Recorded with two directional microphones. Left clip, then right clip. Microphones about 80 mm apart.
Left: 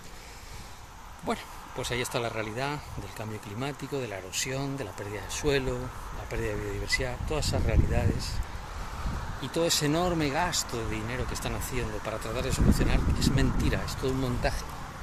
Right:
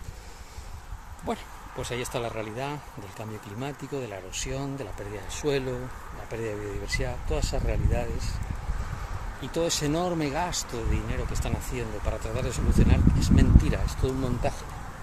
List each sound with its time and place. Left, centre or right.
1.3 s speech: centre
9.4 s speech: centre
14.2 s speech: right